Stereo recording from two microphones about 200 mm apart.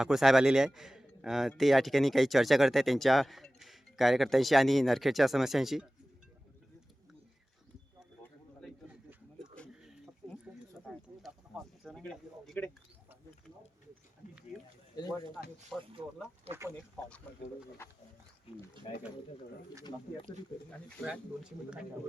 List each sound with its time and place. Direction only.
0.0 s a man's voice: centre (ahead or behind)
8.6 s a sound: centre (ahead or behind)
15.7 s a man's voice: centre (ahead or behind)
16.5 s speech: 15° right (ahead or behind)
19.8 s speech: 25° left (ahead or behind)